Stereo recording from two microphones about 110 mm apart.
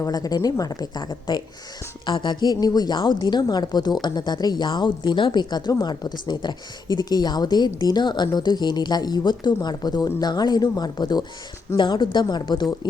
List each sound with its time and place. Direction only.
0.0 s a woman's voice: 35° left (ahead or behind)